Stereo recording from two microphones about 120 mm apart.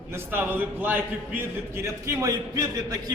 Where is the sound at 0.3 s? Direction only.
15° right (ahead or behind).